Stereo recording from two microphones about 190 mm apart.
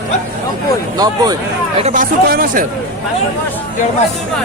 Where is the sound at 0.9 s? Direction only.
20° right (ahead or behind).